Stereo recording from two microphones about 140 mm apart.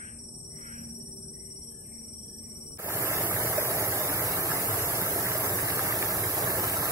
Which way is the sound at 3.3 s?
20° right (ahead or behind).